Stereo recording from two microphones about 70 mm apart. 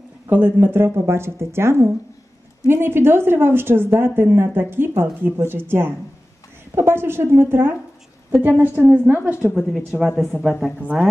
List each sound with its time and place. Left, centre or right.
0.3 s a woman's voice: right
10.0 s speech: centre
10.8 s a woman's voice: centre